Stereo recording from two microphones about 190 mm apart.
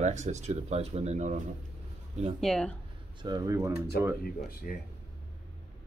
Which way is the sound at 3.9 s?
55° left (ahead or behind).